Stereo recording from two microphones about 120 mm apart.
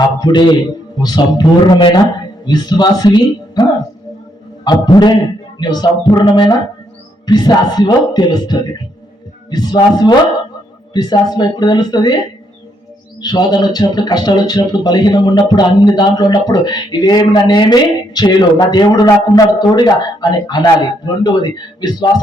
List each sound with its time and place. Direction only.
0.2 s speech: 35° left (ahead or behind)
13.2 s speech: 35° left (ahead or behind)